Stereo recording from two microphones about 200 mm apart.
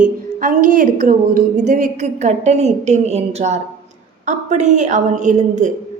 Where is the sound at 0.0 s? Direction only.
45° right (ahead or behind).